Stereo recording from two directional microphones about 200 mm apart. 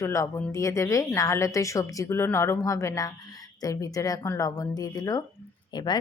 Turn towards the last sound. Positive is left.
turn(degrees=20)  # may be behind; listen again after turning